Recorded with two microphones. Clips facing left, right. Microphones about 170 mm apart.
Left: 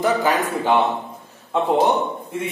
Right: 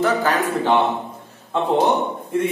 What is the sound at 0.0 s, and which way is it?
Speech, 15° left (ahead or behind).